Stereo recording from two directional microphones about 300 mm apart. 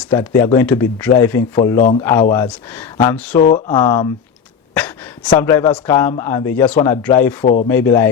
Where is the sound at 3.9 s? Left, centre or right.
Centre.